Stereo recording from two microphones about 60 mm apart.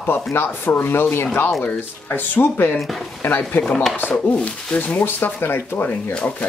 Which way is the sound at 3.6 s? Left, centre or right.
Centre.